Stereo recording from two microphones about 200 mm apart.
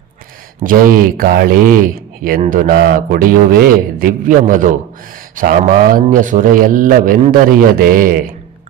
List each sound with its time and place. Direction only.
0.6 s a man's voice: 45° right (ahead or behind)